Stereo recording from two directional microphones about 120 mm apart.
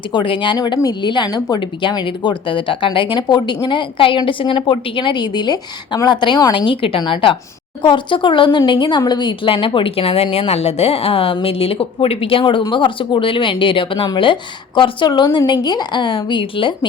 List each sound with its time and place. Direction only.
0.1 s a woman's voice: 40° left (ahead or behind)